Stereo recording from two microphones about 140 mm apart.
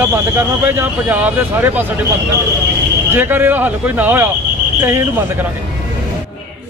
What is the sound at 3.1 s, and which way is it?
Speech, 15° right (ahead or behind).